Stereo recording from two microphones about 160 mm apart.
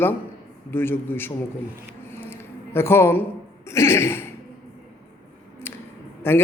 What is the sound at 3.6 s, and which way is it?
Speech, 15° left (ahead or behind).